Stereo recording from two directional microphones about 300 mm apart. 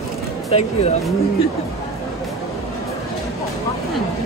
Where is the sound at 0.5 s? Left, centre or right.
Left.